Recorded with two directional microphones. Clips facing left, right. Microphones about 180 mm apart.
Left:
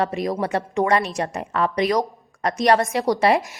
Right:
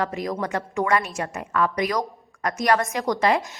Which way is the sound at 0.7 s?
30° left (ahead or behind).